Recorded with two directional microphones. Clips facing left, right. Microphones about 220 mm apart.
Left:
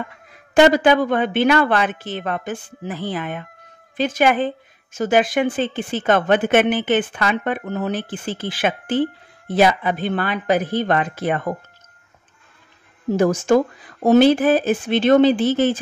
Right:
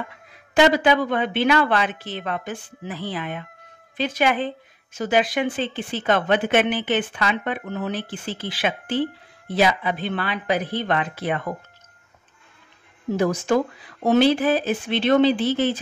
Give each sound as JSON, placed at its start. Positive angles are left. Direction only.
{"t": 0.6, "sound": "speech", "side_deg": 50}
{"t": 13.1, "sound": "speech", "side_deg": 45}